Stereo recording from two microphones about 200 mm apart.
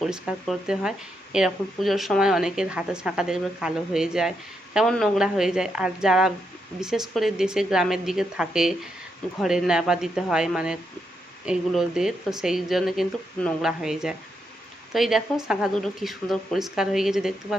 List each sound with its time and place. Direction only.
0.0 s speech: centre (ahead or behind)